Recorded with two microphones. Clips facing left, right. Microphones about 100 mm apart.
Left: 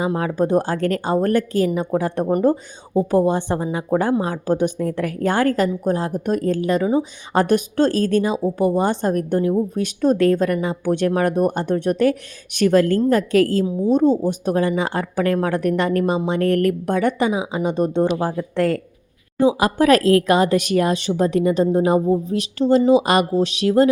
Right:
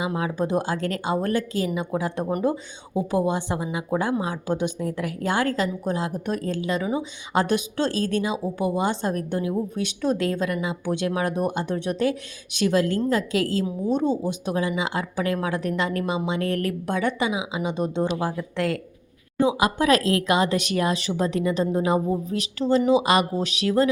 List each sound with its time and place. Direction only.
0.0 s speech: 45° left (ahead or behind)
2.3 s a woman's voice: 40° left (ahead or behind)